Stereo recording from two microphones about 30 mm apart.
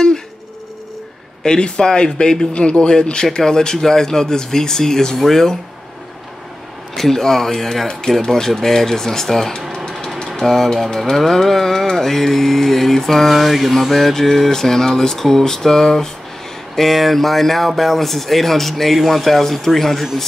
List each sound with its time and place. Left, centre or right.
1.4 s speech: left
2.5 s speech: left; by 5.6 s centre
7.0 s speech: centre
13.3 s speech: centre
16.7 s speech: centre